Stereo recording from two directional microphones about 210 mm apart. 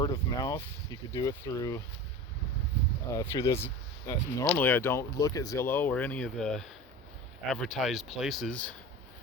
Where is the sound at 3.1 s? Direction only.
15° left (ahead or behind).